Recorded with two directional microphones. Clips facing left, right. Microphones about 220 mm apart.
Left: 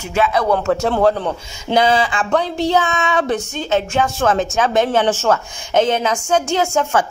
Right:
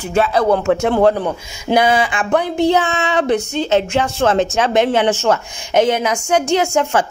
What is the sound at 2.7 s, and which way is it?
Speech, 25° right (ahead or behind).